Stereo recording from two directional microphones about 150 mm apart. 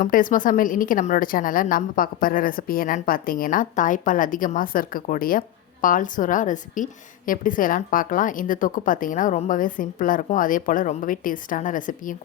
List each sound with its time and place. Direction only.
0.0 s a woman's voice: 65° left (ahead or behind)